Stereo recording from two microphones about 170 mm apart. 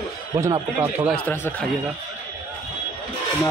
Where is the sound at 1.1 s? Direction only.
10° left (ahead or behind).